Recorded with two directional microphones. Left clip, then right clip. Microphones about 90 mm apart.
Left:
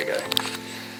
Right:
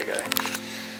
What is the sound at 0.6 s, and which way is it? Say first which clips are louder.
Music: even; centre (ahead or behind).